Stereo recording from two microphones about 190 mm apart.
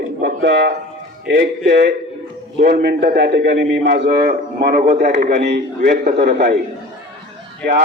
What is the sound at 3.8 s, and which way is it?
A man's voice, 50° right (ahead or behind).